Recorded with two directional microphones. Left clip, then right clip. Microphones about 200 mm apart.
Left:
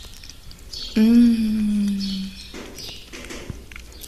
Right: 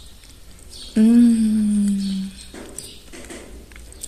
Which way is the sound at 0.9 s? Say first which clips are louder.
Right 1 dB; 20° right (ahead or behind).